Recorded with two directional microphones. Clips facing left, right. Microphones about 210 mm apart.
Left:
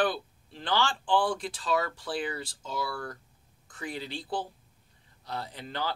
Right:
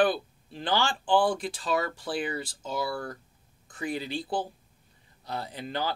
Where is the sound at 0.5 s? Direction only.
10° right (ahead or behind).